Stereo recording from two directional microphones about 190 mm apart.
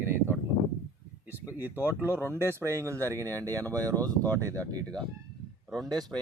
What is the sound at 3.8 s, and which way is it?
Speech, 10° left (ahead or behind).